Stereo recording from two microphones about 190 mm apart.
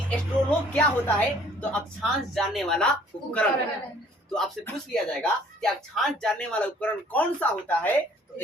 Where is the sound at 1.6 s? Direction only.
Centre (ahead or behind).